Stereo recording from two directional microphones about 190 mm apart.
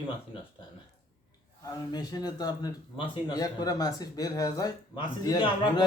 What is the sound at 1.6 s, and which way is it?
Speech, 20° left (ahead or behind).